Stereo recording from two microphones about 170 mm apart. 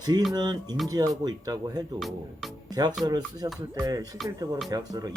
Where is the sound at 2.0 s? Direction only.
Centre (ahead or behind).